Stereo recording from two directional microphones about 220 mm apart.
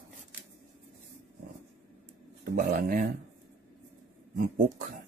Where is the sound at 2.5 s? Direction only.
40° right (ahead or behind).